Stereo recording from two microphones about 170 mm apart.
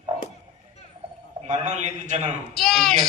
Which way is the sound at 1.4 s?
40° right (ahead or behind).